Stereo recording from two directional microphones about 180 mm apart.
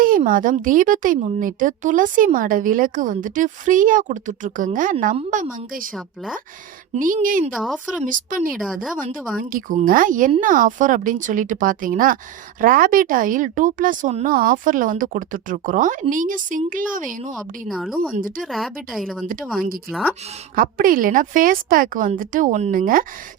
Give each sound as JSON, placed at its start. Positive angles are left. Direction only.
{"t": 0.0, "sound": "a woman's voice", "side_deg": -50}
{"t": 5.9, "sound": "a woman's voice", "side_deg": 0}
{"t": 6.9, "sound": "a woman's voice", "side_deg": -50}
{"t": 7.5, "sound": "a woman's voice", "side_deg": 0}
{"t": 8.0, "sound": "a woman's voice", "side_deg": -50}
{"t": 8.5, "sound": "a woman's voice", "side_deg": 0}
{"t": 9.4, "sound": "a woman's voice", "side_deg": -50}
{"t": 17.3, "sound": "a woman's voice", "side_deg": 0}
{"t": 18.2, "sound": "a woman's voice", "side_deg": -50}
{"t": 18.4, "sound": "a woman's voice", "side_deg": 0}
{"t": 20.6, "sound": "a woman's voice", "side_deg": -50}